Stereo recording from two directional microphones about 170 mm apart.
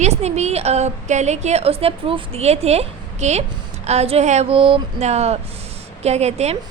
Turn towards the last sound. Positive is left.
turn(degrees=-40)  # may be behind; listen again after turning